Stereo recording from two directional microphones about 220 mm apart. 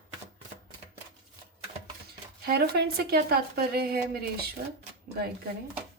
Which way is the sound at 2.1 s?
45° right (ahead or behind).